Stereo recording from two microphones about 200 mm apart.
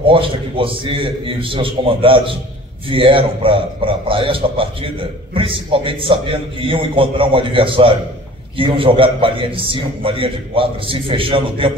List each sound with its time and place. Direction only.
0.0 s a man's voice: 25° right (ahead or behind)